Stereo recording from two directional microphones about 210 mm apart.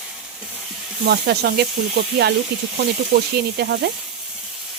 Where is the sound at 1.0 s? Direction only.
50° right (ahead or behind).